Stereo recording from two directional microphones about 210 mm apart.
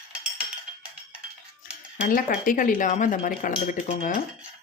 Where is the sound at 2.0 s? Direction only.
40° left (ahead or behind).